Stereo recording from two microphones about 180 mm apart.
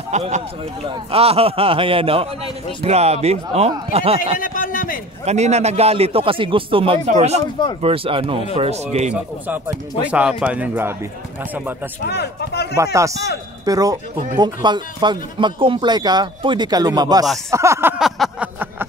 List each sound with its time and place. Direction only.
0.1 s a man's voice: 40° right (ahead or behind)
4.4 s a man's voice: 50° left (ahead or behind)
5.2 s a man's voice: 40° right (ahead or behind)
9.1 s speech: 10° right (ahead or behind)
12.1 s speech: 65° left (ahead or behind)
12.7 s speech: 15° right (ahead or behind)
17.5 s a sound: 15° right (ahead or behind)